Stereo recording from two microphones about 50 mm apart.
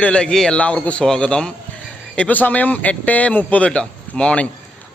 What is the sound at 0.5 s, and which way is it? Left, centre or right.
A man's voice, left.